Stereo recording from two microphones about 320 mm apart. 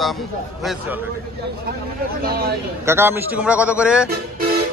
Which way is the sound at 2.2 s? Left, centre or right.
Right.